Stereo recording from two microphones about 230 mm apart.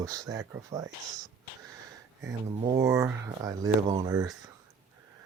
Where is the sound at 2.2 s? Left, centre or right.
Centre.